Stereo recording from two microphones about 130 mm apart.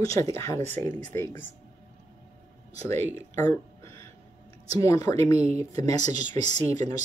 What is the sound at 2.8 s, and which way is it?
Speech, 20° left (ahead or behind).